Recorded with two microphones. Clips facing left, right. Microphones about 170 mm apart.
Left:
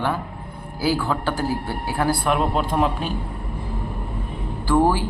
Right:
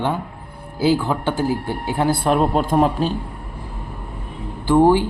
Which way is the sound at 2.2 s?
40° right (ahead or behind).